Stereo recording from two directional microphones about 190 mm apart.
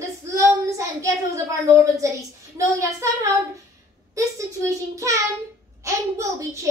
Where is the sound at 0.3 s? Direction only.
15° right (ahead or behind).